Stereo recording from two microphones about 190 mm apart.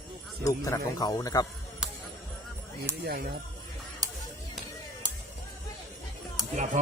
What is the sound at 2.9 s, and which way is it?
Speech, 15° right (ahead or behind).